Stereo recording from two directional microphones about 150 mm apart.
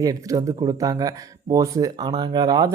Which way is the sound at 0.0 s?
25° right (ahead or behind).